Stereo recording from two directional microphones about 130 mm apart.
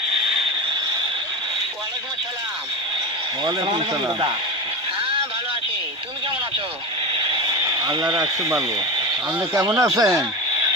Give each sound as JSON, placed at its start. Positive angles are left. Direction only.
{"t": 3.4, "sound": "speech", "side_deg": -35}
{"t": 7.1, "sound": "a sound", "side_deg": -40}
{"t": 9.6, "sound": "speech", "side_deg": -25}